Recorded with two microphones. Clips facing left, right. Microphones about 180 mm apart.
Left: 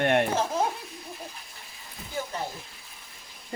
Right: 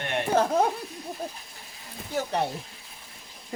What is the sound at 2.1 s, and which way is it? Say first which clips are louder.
Speech: right 6 dB; 70° right (ahead or behind).